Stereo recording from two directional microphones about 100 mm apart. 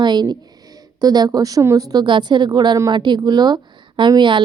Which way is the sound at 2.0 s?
50° right (ahead or behind).